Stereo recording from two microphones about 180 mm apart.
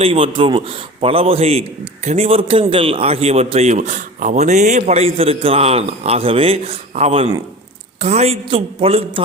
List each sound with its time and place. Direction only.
0.0 s a man's voice: 30° right (ahead or behind)